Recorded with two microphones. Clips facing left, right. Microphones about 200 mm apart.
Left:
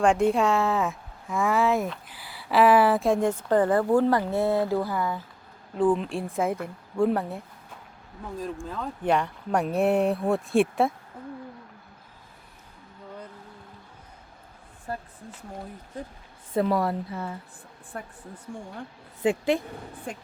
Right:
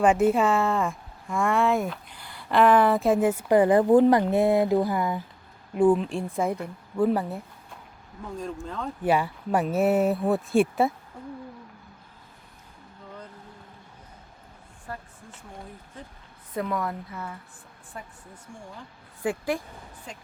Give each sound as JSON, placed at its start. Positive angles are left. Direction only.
{"t": 0.0, "sound": "speech", "side_deg": -5}
{"t": 6.0, "sound": "speech", "side_deg": 0}
{"t": 9.0, "sound": "speech", "side_deg": -5}
{"t": 14.9, "sound": "speech", "side_deg": 30}
{"t": 16.6, "sound": "speech", "side_deg": 35}
{"t": 17.9, "sound": "speech", "side_deg": 60}
{"t": 19.2, "sound": "speech", "side_deg": 25}
{"t": 20.1, "sound": "speech", "side_deg": 55}